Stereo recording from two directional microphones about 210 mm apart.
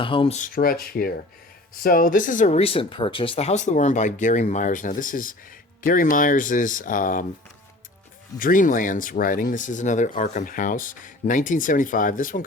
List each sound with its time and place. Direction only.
0.0 s speech: 25° left (ahead or behind); by 7.3 s 40° left (ahead or behind)
8.4 s speech: 40° left (ahead or behind)